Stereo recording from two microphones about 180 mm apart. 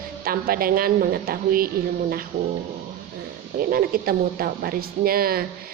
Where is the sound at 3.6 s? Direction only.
55° right (ahead or behind).